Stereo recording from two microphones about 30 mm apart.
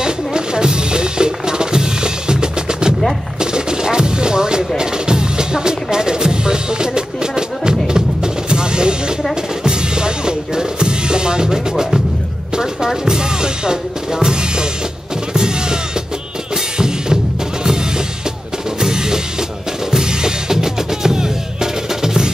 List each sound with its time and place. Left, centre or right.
0.0 s music: right
12.5 s drum: right
15.3 s music: right
18.8 s drum: right
19.9 s music: right